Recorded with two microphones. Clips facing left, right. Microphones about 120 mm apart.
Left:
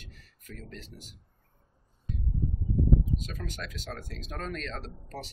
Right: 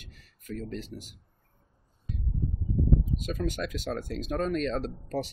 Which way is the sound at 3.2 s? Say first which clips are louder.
Right 8 dB; 15° right (ahead or behind).